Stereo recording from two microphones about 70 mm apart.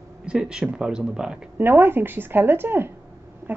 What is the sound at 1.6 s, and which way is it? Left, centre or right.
A woman's voice, right.